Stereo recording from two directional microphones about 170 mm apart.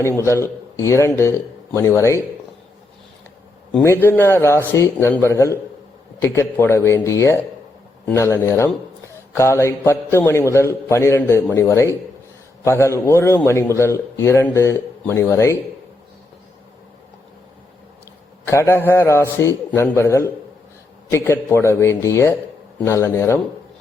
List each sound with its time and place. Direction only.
0.0 s speech: 15° left (ahead or behind)
3.7 s a man's voice: 10° left (ahead or behind)
18.4 s speech: 15° left (ahead or behind)